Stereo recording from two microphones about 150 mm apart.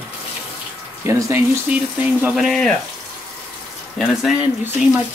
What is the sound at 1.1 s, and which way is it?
Speech, 15° right (ahead or behind).